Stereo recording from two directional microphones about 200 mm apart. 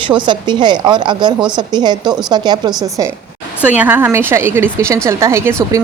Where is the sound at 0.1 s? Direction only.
20° right (ahead or behind).